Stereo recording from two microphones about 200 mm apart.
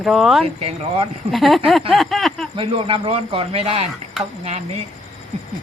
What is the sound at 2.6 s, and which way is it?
A man's voice, 25° right (ahead or behind).